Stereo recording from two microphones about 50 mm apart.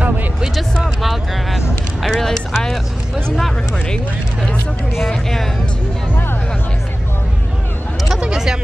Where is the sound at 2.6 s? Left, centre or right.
Centre.